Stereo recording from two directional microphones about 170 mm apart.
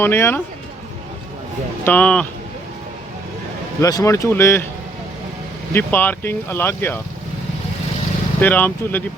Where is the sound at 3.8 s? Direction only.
20° left (ahead or behind).